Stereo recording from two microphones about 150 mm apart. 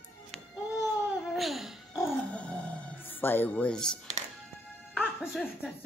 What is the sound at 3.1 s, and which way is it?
Speech, 15° left (ahead or behind).